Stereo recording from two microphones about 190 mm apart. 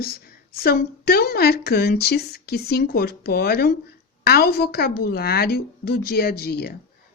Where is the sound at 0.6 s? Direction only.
55° left (ahead or behind).